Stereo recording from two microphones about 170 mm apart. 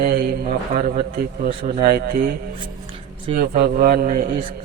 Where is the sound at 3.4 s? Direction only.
65° right (ahead or behind); by 4.5 s 50° right (ahead or behind).